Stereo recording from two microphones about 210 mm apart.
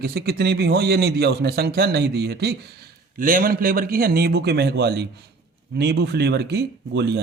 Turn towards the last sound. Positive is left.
turn(degrees=-50)  # may be behind; listen again after turning